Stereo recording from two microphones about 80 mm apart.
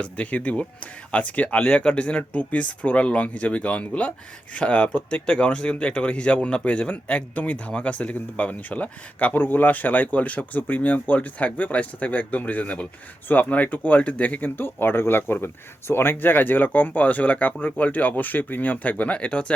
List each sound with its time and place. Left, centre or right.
0.0 s speech: centre